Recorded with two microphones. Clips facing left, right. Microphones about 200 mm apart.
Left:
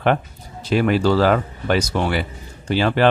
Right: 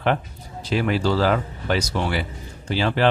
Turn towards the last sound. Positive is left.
turn(degrees=55)  # may be behind; listen again after turning